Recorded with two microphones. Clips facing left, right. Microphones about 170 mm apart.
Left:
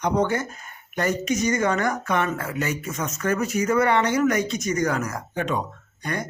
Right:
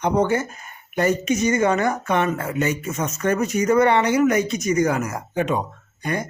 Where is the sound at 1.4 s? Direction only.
25° right (ahead or behind).